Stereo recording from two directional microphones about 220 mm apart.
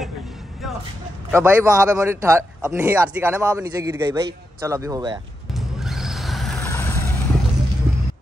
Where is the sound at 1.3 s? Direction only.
15° right (ahead or behind).